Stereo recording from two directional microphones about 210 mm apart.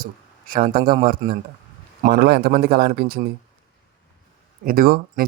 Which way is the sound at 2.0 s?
50° right (ahead or behind).